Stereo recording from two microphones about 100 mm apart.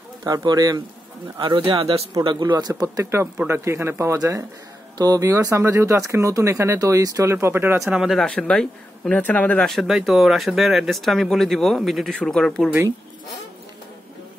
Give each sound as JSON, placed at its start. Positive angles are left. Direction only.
{"t": 0.2, "sound": "speech", "side_deg": -40}
{"t": 1.4, "sound": "speech", "side_deg": -55}
{"t": 2.2, "sound": "speech", "side_deg": -45}
{"t": 2.8, "sound": "speech", "side_deg": -30}
{"t": 7.3, "sound": "speech", "side_deg": -25}
{"t": 7.8, "sound": "speech", "side_deg": -5}
{"t": 9.7, "sound": "speech", "side_deg": 0}